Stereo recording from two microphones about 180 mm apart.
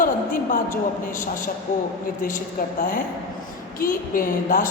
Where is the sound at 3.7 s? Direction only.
50° left (ahead or behind).